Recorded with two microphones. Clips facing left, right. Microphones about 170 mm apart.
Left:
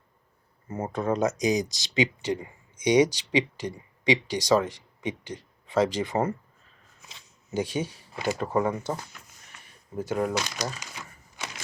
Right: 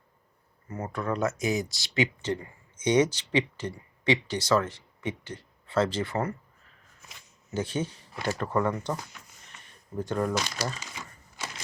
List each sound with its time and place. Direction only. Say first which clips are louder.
0.7 s speech: left 4 dB; 25° left (ahead or behind)